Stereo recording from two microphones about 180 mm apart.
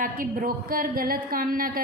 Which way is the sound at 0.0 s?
50° right (ahead or behind).